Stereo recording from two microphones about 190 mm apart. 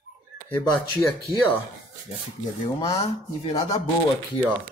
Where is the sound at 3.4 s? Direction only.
30° left (ahead or behind).